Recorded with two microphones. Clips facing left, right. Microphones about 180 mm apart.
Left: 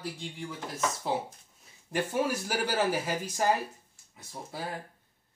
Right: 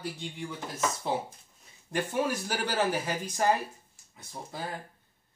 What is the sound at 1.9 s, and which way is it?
Speech, 10° left (ahead or behind).